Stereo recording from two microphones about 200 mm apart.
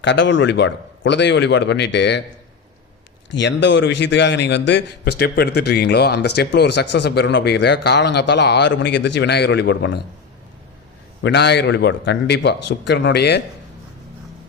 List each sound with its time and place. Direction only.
0.0 s a man's voice: 65° left (ahead or behind)
3.2 s a man's voice: 60° left (ahead or behind)
11.2 s a man's voice: 55° left (ahead or behind)